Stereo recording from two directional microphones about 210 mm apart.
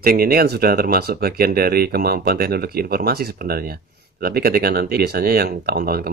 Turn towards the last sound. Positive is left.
turn(degrees=-45)  # may be behind; listen again after turning